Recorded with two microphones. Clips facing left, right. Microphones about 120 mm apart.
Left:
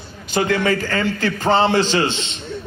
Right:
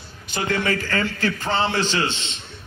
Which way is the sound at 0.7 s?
35° left (ahead or behind).